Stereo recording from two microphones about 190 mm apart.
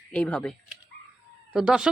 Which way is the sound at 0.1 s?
5° left (ahead or behind).